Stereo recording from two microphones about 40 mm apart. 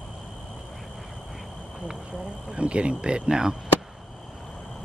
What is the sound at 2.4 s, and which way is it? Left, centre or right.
Speech, right.